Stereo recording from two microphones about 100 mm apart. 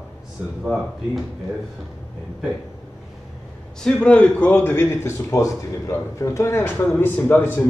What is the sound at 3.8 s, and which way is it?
Speech, 10° left (ahead or behind).